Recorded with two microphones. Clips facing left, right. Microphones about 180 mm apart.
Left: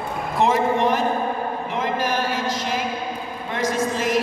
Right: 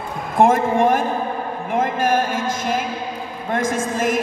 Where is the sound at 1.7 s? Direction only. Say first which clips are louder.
Right 7 dB; 50° right (ahead or behind).